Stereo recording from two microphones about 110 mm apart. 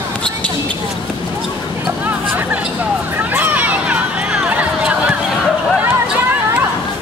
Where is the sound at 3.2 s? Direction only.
15° right (ahead or behind).